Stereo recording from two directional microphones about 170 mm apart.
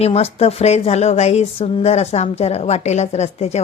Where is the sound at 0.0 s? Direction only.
35° left (ahead or behind).